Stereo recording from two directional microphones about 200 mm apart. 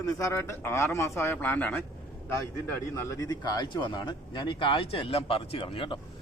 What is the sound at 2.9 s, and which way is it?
Speech, 15° left (ahead or behind).